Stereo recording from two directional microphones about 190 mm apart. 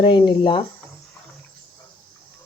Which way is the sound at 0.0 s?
25° left (ahead or behind).